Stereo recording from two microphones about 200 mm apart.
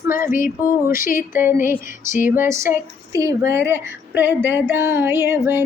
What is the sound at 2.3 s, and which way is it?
Female singing, 10° right (ahead or behind).